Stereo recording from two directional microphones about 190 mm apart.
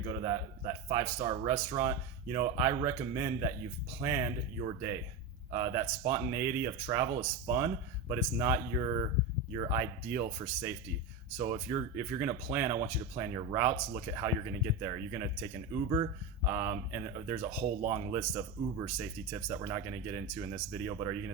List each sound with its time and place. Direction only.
0.0 s a man's voice: 25° right (ahead or behind)
5.5 s speech: 15° right (ahead or behind)
16.5 s speech: 15° right (ahead or behind)